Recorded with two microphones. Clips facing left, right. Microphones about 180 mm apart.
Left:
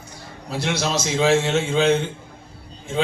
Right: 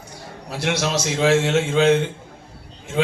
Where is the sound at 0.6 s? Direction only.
65° right (ahead or behind).